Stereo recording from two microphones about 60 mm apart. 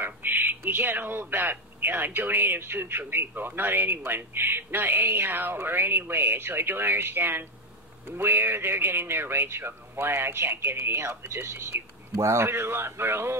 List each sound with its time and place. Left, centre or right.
0.0 s speech: right